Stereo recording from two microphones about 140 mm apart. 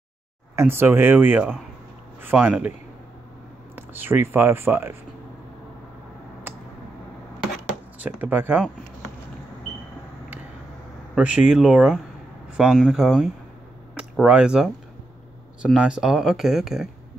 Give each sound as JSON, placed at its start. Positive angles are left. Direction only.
{"t": 0.6, "sound": "speech", "side_deg": -15}
{"t": 3.7, "sound": "speech", "side_deg": -15}
{"t": 8.0, "sound": "speech", "side_deg": -15}
{"t": 11.1, "sound": "speech", "side_deg": -5}
{"t": 15.7, "sound": "speech", "side_deg": -5}